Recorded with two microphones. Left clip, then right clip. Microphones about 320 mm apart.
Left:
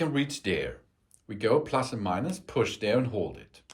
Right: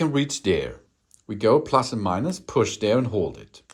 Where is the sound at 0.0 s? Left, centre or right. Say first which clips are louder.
Right 6 dB; centre.